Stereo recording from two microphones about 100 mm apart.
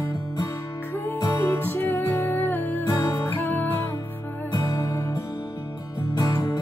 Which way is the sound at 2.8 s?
35° left (ahead or behind).